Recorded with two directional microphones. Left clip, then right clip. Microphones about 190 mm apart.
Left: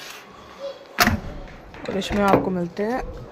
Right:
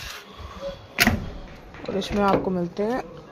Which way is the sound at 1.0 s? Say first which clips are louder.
Left 2 dB; 20° left (ahead or behind).